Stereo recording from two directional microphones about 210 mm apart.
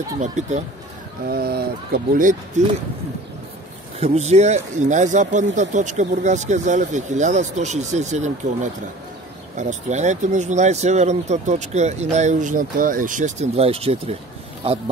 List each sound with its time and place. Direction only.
0.2 s speech: 35° right (ahead or behind)
1.2 s speech: 45° right (ahead or behind)
4.0 s speech: 30° right (ahead or behind)
9.6 s speech: 35° right (ahead or behind)